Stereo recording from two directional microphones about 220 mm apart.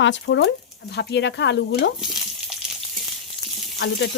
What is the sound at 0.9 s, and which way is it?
Speech, 50° left (ahead or behind).